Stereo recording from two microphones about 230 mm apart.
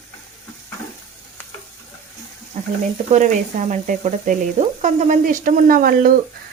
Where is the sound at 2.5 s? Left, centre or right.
Right.